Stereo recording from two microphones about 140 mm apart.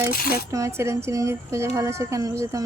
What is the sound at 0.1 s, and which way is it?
Speech, 90° left.